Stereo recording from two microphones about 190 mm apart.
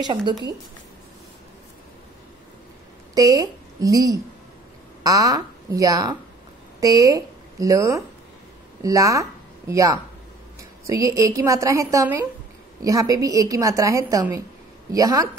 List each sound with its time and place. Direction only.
0.0 s speech: 25° right (ahead or behind)
3.2 s a woman's voice: 20° right (ahead or behind)